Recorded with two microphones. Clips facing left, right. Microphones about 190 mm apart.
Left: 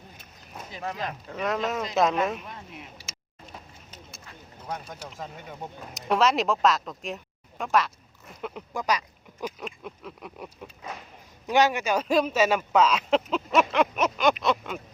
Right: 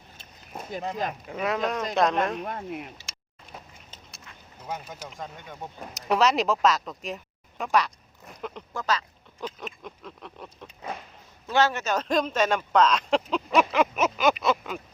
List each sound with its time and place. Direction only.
0.8 s speech: 20° right (ahead or behind)
1.4 s speech: centre (ahead or behind)
2.4 s speech: 55° right (ahead or behind)
4.6 s speech: 5° right (ahead or behind)
8.7 s speech: 15° left (ahead or behind)